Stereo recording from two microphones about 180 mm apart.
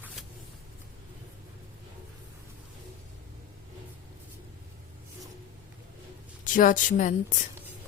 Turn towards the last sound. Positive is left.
turn(degrees=45)  # may be behind; listen again after turning